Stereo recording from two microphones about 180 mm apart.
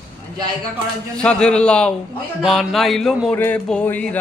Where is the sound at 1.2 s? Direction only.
5° left (ahead or behind).